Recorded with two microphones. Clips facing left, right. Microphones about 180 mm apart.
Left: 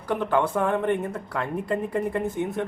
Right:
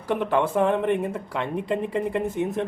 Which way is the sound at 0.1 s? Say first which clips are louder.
Right 1 dB; 20° right (ahead or behind).